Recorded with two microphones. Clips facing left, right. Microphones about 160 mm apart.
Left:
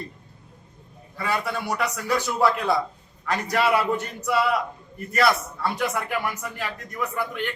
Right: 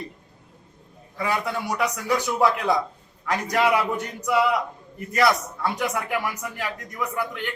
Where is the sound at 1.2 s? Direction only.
15° right (ahead or behind).